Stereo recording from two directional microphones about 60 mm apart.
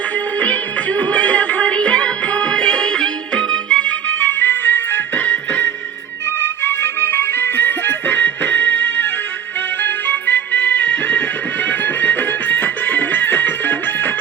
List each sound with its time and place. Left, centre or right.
0.3 s music: left
6.2 s music: left